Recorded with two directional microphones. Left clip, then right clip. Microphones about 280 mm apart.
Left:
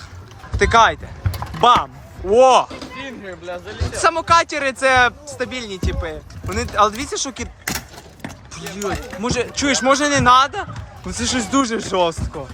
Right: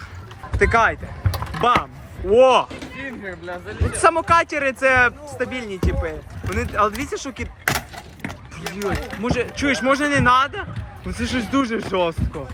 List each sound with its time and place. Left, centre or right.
0.6 s speech: centre
1.2 s typing: centre
1.8 s speech: centre
3.2 s speech: left
4.0 s speech: centre